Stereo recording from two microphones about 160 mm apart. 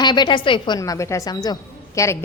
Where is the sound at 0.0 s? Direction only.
25° left (ahead or behind).